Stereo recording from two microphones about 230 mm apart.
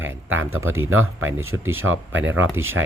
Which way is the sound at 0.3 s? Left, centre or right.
Right.